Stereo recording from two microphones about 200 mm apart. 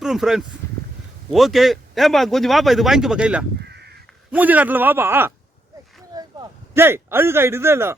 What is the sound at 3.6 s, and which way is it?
Crow, 55° right (ahead or behind).